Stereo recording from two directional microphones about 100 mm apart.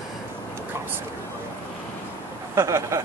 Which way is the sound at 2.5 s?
30° right (ahead or behind).